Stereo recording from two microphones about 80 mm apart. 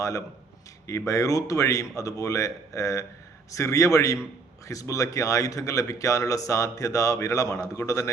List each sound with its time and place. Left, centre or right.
0.9 s speech: left